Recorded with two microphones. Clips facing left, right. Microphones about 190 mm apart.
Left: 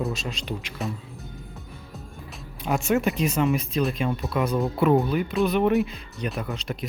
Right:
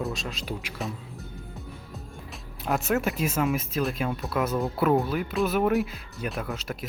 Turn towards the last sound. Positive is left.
turn(degrees=-5)  # may be behind; listen again after turning